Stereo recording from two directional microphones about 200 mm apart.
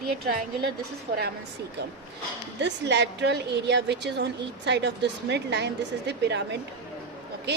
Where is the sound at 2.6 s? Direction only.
60° right (ahead or behind).